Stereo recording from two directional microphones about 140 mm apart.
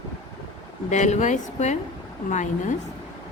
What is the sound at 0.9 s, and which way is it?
A woman's voice, 55° left (ahead or behind).